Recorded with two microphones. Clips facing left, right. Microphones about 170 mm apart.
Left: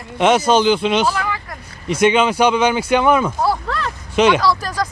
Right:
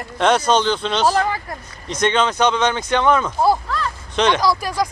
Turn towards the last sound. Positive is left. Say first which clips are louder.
# even
turn(degrees=-10)  # may be behind; listen again after turning